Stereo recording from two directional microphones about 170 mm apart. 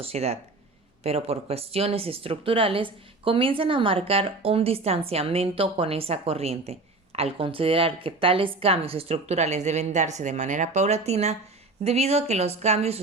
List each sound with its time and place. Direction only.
0.0 s speech: 35° right (ahead or behind)